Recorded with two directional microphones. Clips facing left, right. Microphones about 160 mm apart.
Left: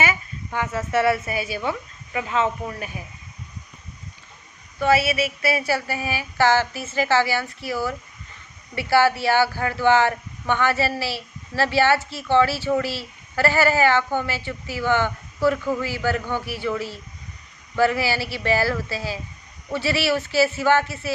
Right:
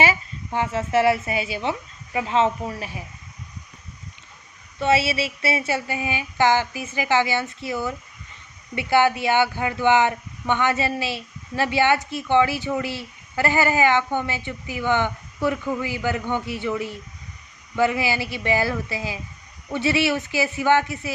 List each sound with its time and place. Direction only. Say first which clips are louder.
0.0 s speech: right 3 dB; 30° right (ahead or behind)
4.8 s speech: left 1 dB; 25° right (ahead or behind)